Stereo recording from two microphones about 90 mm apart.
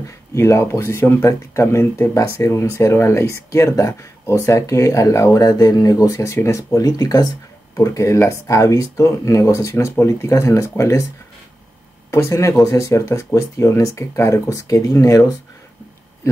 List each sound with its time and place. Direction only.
0.3 s speech: 30° left (ahead or behind)
12.1 s speech: 35° left (ahead or behind)